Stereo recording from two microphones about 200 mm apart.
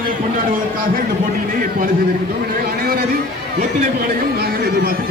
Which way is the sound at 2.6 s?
50° right (ahead or behind).